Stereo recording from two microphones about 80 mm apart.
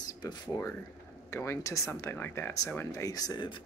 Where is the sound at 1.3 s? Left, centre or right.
Left.